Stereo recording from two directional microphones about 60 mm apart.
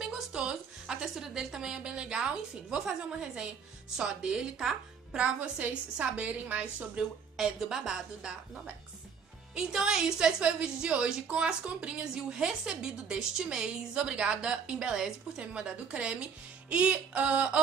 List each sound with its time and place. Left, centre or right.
0.0 s a sound: centre
1.1 s a woman's voice: centre
3.9 s a woman's voice: centre
7.3 s a woman's voice: centre
9.6 s a woman's voice: centre